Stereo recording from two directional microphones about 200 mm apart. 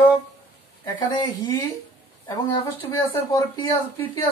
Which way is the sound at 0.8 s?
20° left (ahead or behind).